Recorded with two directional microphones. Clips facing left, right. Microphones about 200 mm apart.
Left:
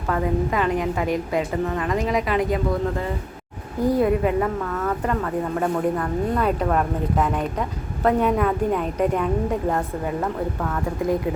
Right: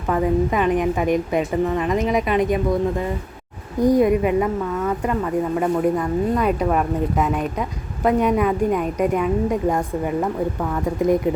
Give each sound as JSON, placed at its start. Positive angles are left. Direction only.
{"t": 0.1, "sound": "a woman's voice", "side_deg": -20}
{"t": 3.8, "sound": "a woman's voice", "side_deg": -15}